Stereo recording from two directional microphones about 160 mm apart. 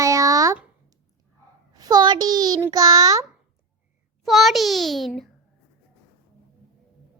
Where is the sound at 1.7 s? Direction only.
25° right (ahead or behind).